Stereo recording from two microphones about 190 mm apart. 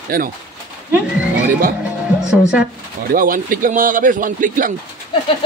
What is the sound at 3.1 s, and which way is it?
Speech, 45° right (ahead or behind).